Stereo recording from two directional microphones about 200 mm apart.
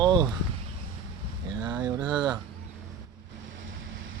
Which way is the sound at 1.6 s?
20° right (ahead or behind).